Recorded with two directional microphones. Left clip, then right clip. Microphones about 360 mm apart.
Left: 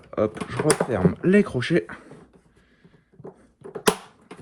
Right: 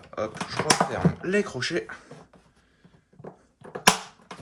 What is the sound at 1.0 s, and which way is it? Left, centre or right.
Speech, centre.